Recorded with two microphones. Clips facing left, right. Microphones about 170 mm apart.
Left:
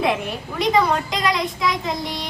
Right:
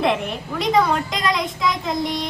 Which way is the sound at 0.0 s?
Centre (ahead or behind).